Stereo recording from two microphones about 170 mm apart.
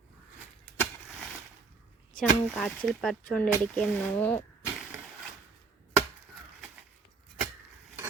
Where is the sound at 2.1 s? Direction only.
Centre (ahead or behind).